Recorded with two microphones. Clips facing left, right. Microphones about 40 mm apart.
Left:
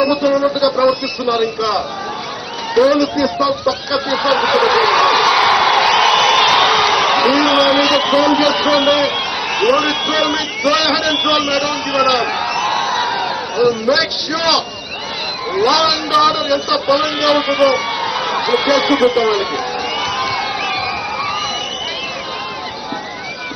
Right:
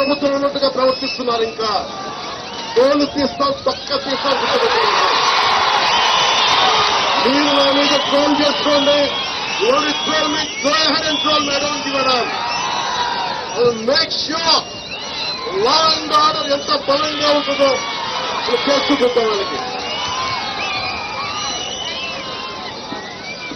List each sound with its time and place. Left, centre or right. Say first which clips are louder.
0.0 s a man's voice: left 2 dB; centre
3.0 s a man's voice: left 2 dB; centre
4.3 s a sound: left 3 dB; centre
8.0 s a man's voice: left 2 dB; centre
19.2 s a sound: left 2 dB; centre
20.3 s crowd: left 3 dB; centre